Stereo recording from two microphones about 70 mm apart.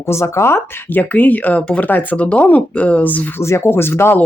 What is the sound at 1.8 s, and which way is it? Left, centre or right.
Speech, left.